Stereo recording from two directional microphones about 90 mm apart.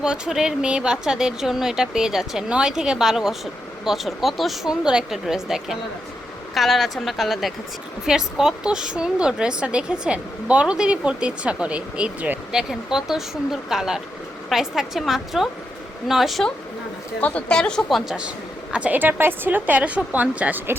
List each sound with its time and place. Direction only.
0.0 s a woman's voice: 5° right (ahead or behind)
17.2 s a woman's voice: 15° left (ahead or behind)
18.7 s a woman's voice: 15° right (ahead or behind)